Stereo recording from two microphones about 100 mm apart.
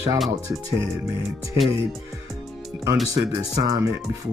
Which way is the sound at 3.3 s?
35° right (ahead or behind).